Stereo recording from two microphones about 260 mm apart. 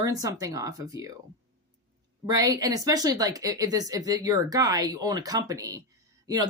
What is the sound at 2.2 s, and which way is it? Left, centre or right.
Speech, centre.